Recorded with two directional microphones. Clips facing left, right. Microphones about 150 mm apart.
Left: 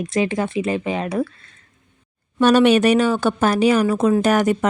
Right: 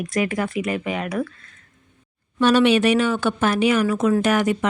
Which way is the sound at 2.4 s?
45° left (ahead or behind).